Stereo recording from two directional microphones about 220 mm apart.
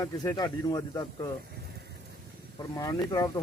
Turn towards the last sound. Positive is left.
turn(degrees=15)  # may be behind; listen again after turning